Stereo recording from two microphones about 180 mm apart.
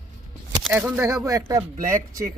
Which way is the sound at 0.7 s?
10° right (ahead or behind).